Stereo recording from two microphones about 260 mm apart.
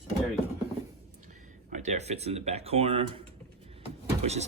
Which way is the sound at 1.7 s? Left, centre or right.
Right.